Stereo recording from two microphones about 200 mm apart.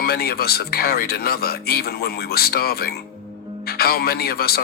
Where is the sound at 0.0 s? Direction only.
50° left (ahead or behind).